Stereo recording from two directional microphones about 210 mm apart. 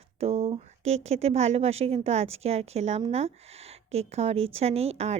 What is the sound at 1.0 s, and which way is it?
A woman's voice, 30° right (ahead or behind).